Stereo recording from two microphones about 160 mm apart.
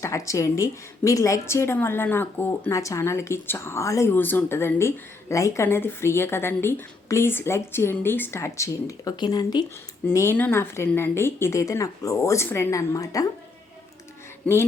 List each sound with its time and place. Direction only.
0.0 s a woman's voice: 20° left (ahead or behind)
10.1 s a woman's voice: 15° left (ahead or behind)